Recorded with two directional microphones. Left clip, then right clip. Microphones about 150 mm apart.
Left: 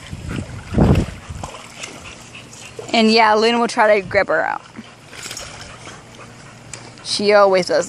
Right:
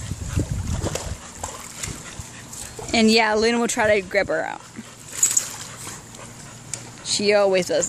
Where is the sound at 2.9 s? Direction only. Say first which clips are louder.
Left 5 dB; centre (ahead or behind).